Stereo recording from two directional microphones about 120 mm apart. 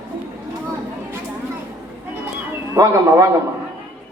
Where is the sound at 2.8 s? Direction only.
30° right (ahead or behind).